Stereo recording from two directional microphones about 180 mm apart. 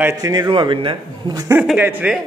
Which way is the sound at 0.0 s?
20° right (ahead or behind).